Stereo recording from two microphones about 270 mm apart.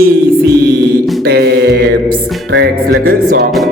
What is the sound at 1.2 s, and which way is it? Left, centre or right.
Mantra, right.